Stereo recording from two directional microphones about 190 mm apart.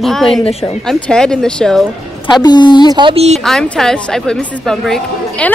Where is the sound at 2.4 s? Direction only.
25° left (ahead or behind).